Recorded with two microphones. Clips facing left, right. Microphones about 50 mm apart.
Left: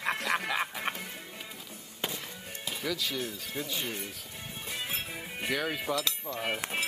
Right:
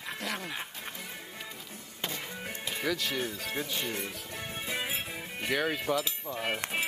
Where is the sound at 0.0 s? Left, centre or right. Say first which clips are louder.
Left 6 dB; left.